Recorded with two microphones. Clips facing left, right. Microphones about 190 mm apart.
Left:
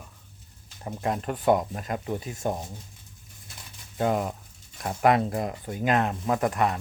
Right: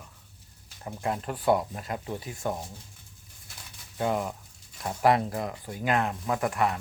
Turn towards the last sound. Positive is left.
turn(degrees=20)  # may be behind; listen again after turning